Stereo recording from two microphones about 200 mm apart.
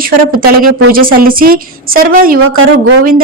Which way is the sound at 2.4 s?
90° right.